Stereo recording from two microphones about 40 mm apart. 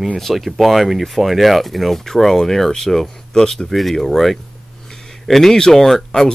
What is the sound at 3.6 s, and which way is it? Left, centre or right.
Speech, centre.